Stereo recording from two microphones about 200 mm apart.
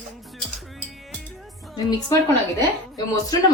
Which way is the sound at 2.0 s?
15° left (ahead or behind).